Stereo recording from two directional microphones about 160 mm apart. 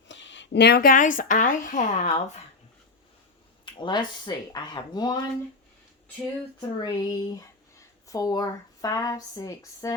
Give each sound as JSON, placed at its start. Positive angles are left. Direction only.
{"t": 0.5, "sound": "speech", "side_deg": 85}
{"t": 3.8, "sound": "speech", "side_deg": 30}
{"t": 6.6, "sound": "speech", "side_deg": 25}